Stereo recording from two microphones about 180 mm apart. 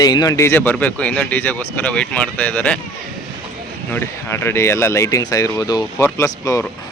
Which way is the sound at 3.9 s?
10° left (ahead or behind).